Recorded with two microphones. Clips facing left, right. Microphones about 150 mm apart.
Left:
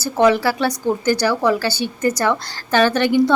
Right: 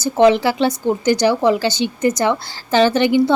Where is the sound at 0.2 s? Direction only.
20° right (ahead or behind).